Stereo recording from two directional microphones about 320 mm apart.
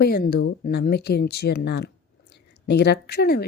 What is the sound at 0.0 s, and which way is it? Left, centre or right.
Speech, left.